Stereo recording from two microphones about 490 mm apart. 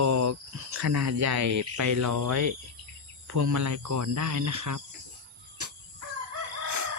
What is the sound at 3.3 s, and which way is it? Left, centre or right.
Cricket, right.